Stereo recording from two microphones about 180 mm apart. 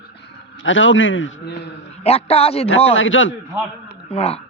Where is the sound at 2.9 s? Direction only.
90° left.